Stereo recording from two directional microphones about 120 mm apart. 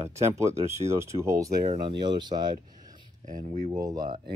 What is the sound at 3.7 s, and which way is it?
Speech, 35° right (ahead or behind).